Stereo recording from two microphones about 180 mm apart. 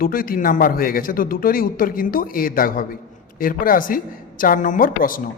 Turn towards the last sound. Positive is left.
turn(degrees=50)  # may be behind; listen again after turning